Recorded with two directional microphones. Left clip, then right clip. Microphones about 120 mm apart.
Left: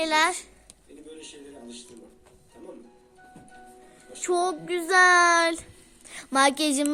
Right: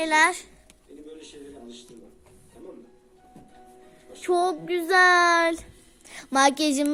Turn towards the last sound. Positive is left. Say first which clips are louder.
# right 1 dB
turn(degrees=-15)  # may be behind; listen again after turning